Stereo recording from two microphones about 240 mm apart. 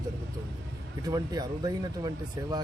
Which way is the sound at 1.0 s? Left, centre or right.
Centre.